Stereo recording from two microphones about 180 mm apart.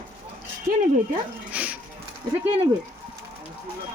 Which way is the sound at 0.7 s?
55° right (ahead or behind).